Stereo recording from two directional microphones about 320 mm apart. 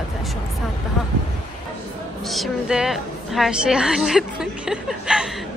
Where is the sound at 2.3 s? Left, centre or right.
Centre.